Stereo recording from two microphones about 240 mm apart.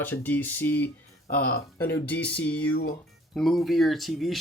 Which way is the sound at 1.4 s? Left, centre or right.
Left.